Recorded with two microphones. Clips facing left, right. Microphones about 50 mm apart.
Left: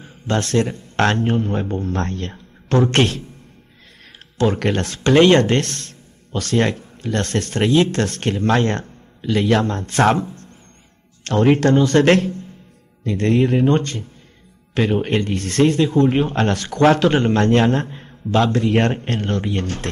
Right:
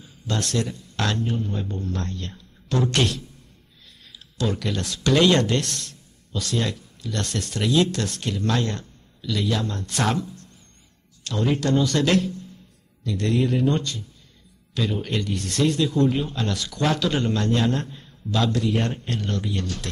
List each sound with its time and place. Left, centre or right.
0.0 s a man's voice: left
4.4 s speech: left
11.2 s a man's voice: left
11.7 s a man's voice: left
18.8 s speech: left